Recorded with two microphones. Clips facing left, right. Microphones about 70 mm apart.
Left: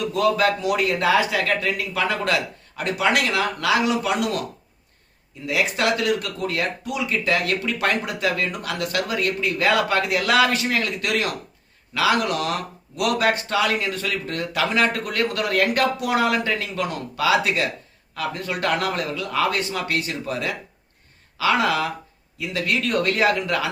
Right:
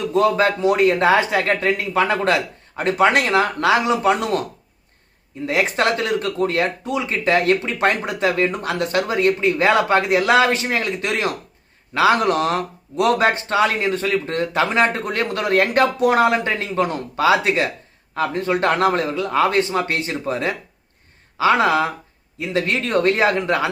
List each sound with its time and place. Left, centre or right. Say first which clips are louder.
0.0 s speech: right 3 dB; right
5.5 s speech: right 3 dB; right